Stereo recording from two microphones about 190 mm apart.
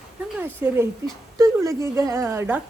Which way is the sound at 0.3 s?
10° right (ahead or behind).